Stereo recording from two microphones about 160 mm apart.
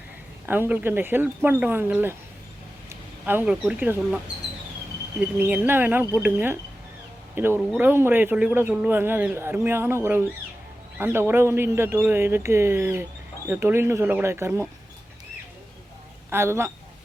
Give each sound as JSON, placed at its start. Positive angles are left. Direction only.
{"t": 0.4, "sound": "a man's voice", "side_deg": -10}
{"t": 3.2, "sound": "a man's voice", "side_deg": -10}
{"t": 5.2, "sound": "a man's voice", "side_deg": -10}
{"t": 16.3, "sound": "a man's voice", "side_deg": -15}